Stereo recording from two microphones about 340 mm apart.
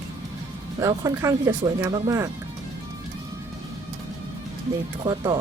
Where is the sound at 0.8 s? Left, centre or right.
Centre.